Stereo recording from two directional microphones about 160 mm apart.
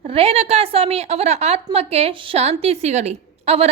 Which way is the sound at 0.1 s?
40° right (ahead or behind).